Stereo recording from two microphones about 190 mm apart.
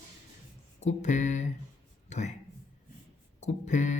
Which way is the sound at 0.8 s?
35° left (ahead or behind).